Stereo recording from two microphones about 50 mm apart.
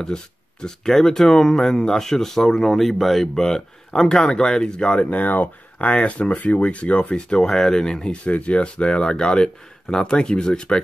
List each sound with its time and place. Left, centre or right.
0.0 s speech: centre
5.1 s speech: left; by 10.8 s centre